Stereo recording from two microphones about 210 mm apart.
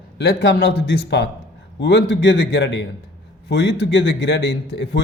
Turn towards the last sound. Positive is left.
turn(degrees=55)  # may be behind; listen again after turning